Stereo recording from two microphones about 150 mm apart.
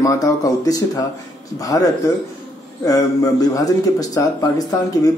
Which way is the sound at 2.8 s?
25° left (ahead or behind).